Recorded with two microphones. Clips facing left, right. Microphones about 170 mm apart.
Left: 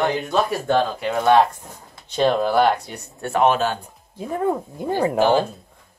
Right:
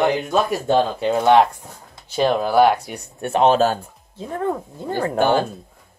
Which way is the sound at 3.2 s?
25° right (ahead or behind).